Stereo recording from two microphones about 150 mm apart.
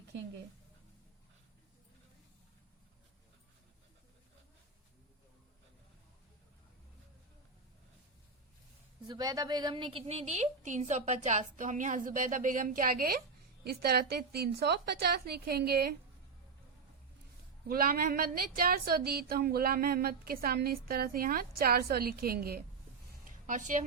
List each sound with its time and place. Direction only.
9.0 s a woman's voice: 25° right (ahead or behind); by 13.1 s 75° right (ahead or behind)
13.7 s a woman's voice: 90° right
17.7 s a woman's voice: 80° right
23.5 s speech: 55° right (ahead or behind)